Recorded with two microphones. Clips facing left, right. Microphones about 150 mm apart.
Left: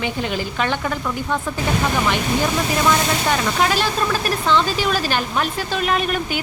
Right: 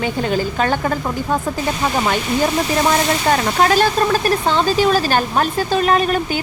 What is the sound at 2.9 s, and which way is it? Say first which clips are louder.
Speech: right 3 dB; 40° right (ahead or behind).